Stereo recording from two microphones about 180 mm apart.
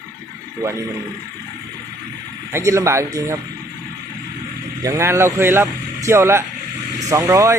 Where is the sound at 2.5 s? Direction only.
15° right (ahead or behind).